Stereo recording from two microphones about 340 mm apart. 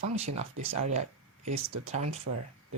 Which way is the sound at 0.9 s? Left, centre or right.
Centre.